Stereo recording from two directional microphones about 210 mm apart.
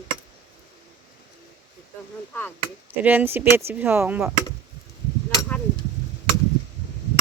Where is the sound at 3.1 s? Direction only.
10° right (ahead or behind).